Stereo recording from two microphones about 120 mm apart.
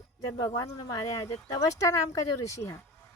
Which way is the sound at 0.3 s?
30° left (ahead or behind).